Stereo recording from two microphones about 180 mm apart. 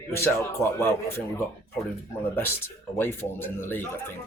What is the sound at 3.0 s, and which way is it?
Speech, 10° left (ahead or behind).